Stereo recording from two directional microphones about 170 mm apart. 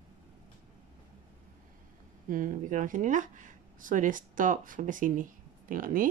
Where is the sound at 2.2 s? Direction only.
50° right (ahead or behind).